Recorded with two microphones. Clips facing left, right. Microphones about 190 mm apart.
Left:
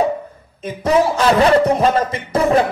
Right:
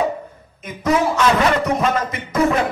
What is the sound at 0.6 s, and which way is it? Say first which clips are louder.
Speech: left 3 dB; 30° left (ahead or behind).